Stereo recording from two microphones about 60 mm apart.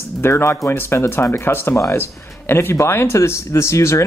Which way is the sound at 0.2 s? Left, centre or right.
Left.